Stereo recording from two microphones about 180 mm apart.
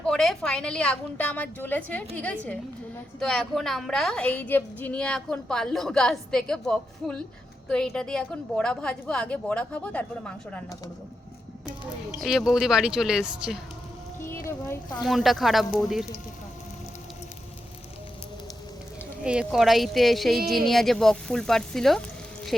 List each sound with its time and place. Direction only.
0.0 s a woman's voice: 5° left (ahead or behind)
12.2 s a woman's voice: centre (ahead or behind)
14.7 s speech: 20° left (ahead or behind)
15.0 s a woman's voice: centre (ahead or behind)
19.2 s a woman's voice: 5° right (ahead or behind)